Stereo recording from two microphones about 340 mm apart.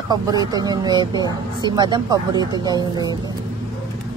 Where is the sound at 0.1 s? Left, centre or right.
Centre.